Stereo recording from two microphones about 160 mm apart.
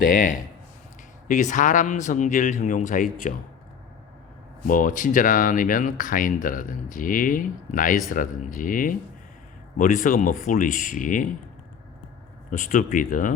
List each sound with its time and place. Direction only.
0.0 s speech: 60° left (ahead or behind)
4.6 s speech: 60° left (ahead or behind)
12.5 s speech: 55° left (ahead or behind)